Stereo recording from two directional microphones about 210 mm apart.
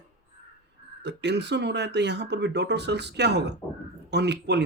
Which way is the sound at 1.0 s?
55° right (ahead or behind).